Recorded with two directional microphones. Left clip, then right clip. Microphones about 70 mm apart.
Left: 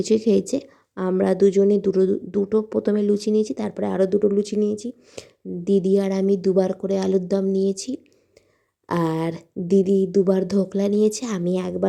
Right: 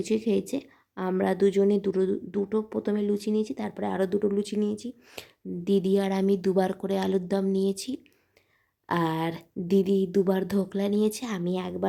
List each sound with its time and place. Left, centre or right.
0.0 s a woman's voice: left
1.2 s speech: left
5.1 s speech: centre; by 11.9 s left